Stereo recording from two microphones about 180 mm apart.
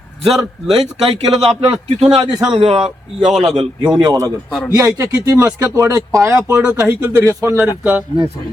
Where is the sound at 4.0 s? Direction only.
20° right (ahead or behind).